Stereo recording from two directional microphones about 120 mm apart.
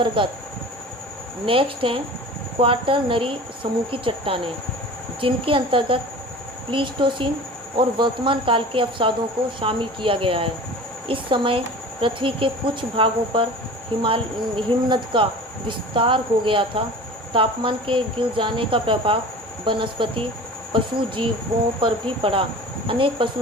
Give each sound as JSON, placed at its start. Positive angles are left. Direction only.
{"t": 0.2, "sound": "speech", "side_deg": -45}
{"t": 1.5, "sound": "speech", "side_deg": -50}